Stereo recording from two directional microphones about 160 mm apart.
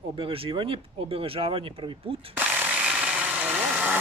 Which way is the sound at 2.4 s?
10° right (ahead or behind).